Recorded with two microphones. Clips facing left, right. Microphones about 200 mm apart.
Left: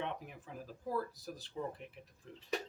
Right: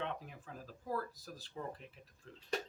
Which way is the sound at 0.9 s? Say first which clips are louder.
Left 4 dB; 20° left (ahead or behind).